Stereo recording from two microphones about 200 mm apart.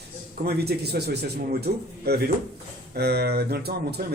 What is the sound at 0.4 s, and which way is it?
Speech, 55° right (ahead or behind).